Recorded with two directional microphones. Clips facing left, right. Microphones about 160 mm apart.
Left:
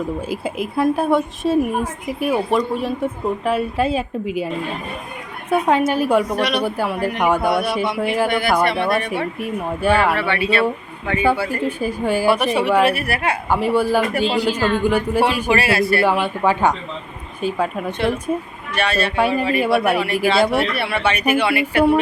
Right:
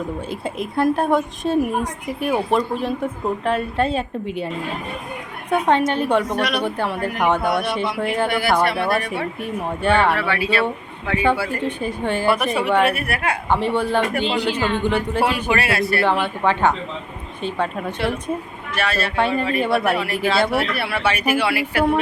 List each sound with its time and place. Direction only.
0.3 s a woman's voice: 5° left (ahead or behind)
8.3 s a woman's voice: 10° right (ahead or behind)
9.1 s a woman's voice: 5° left (ahead or behind)
14.6 s speech: 20° right (ahead or behind)
14.8 s a woman's voice: 10° left (ahead or behind)